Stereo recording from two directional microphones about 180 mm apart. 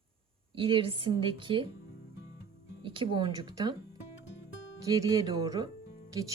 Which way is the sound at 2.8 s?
30° right (ahead or behind).